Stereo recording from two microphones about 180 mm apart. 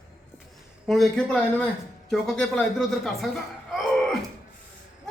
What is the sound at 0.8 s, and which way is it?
A man's voice, centre (ahead or behind).